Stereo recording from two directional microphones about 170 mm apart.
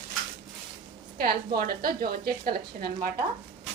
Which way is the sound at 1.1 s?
65° right (ahead or behind).